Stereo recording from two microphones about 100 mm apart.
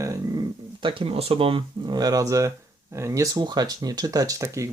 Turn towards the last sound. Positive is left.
turn(degrees=-30)  # may be behind; listen again after turning